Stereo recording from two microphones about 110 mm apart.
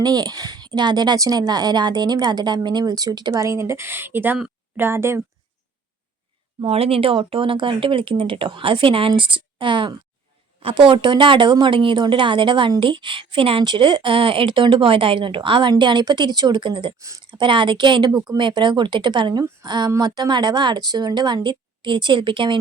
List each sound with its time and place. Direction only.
0.0 s a woman's voice: 40° right (ahead or behind); by 5.2 s 20° right (ahead or behind)
6.6 s speech: 60° right (ahead or behind)
17.0 s speech: 30° right (ahead or behind)
17.4 s a woman's voice: 45° right (ahead or behind)